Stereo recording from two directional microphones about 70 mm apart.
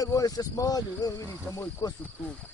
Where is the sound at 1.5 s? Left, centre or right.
Left.